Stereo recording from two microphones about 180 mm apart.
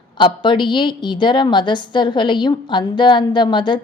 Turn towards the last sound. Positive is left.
turn(degrees=25)  # may be behind; listen again after turning